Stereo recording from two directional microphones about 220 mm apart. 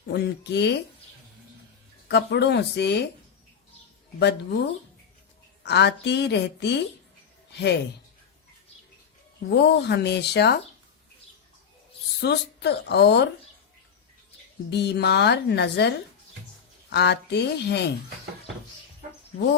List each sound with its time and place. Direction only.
0.1 s a woman's voice: 50° left (ahead or behind)
2.0 s a woman's voice: 50° left (ahead or behind)
4.2 s a woman's voice: 50° left (ahead or behind)
9.5 s a woman's voice: 50° left (ahead or behind)
12.2 s a woman's voice: 50° left (ahead or behind)
14.7 s a woman's voice: 50° left (ahead or behind)
16.9 s a woman's voice: 50° left (ahead or behind)